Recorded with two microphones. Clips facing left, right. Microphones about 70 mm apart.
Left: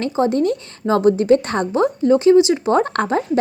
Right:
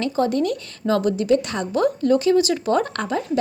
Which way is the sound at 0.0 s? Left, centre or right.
Left.